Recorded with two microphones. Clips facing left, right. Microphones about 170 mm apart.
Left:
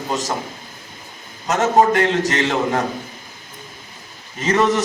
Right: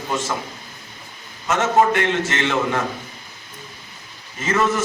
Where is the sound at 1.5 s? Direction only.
40° left (ahead or behind).